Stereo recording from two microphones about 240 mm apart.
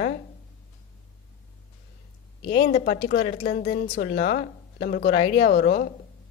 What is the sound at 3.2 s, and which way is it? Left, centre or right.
Speech, left.